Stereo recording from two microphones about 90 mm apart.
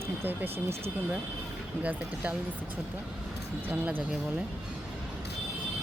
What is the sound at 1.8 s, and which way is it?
Speech, 15° right (ahead or behind).